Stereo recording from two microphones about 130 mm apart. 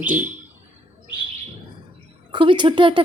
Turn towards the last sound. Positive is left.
turn(degrees=-40)  # may be behind; listen again after turning